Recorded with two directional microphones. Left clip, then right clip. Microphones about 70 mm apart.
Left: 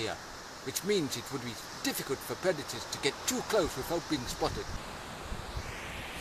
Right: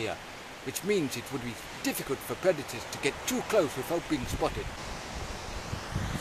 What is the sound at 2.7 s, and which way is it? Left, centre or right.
Speech, centre.